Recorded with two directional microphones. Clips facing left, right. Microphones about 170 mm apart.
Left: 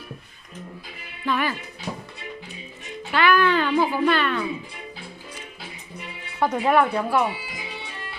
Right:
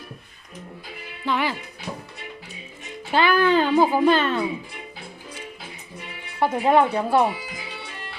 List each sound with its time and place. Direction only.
1.2 s speech: 15° right (ahead or behind)
3.1 s a child's voice: 30° right (ahead or behind)
6.4 s a child's voice: 25° right (ahead or behind)